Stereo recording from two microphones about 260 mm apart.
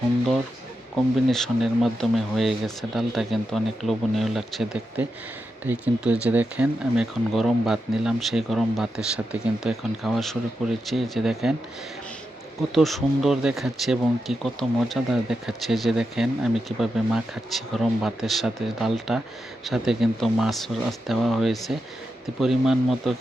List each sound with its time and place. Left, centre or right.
1.3 s speech: centre
12.7 s speech: centre